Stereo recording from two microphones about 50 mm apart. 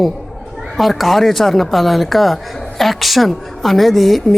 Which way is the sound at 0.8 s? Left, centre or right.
Centre.